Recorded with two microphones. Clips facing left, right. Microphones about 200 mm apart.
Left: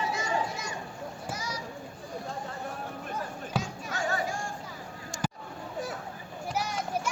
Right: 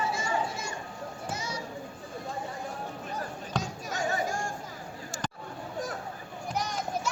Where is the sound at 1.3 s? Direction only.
25° right (ahead or behind).